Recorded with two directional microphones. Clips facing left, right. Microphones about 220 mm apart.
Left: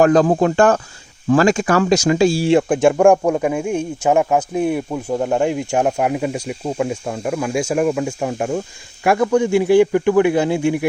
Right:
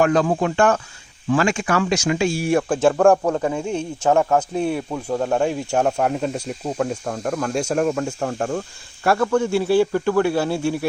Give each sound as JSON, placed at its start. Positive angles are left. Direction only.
{"t": 0.0, "sound": "speech", "side_deg": 40}